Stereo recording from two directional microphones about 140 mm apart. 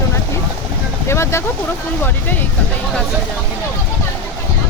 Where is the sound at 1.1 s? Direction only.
20° left (ahead or behind).